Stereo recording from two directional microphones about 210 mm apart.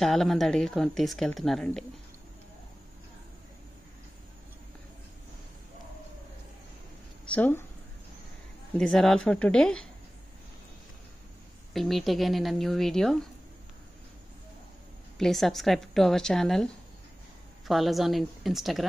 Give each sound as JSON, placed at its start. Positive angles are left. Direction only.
{"t": 0.0, "sound": "speech", "side_deg": 0}
{"t": 7.2, "sound": "speech", "side_deg": 10}
{"t": 8.7, "sound": "speech", "side_deg": 0}
{"t": 11.7, "sound": "speech", "side_deg": 0}
{"t": 15.1, "sound": "speech", "side_deg": 0}